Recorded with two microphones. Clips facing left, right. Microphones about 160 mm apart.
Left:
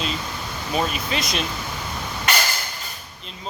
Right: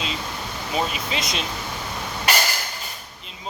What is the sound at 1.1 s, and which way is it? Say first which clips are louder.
Speech: left 2 dB; 20° right (ahead or behind).